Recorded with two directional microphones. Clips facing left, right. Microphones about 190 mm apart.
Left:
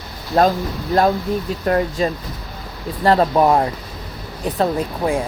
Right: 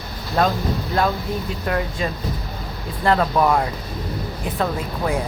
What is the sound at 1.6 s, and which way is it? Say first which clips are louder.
A woman's voice: left 6 dB; 40° left (ahead or behind).